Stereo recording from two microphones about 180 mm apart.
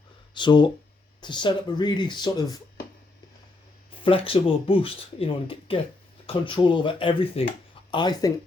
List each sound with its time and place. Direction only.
0.3 s speech: 25° left (ahead or behind)
4.0 s speech: 30° left (ahead or behind)